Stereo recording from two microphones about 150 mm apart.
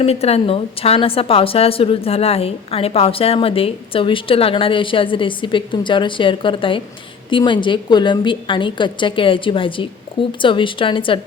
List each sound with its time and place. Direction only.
0.0 s a woman's voice: 40° left (ahead or behind)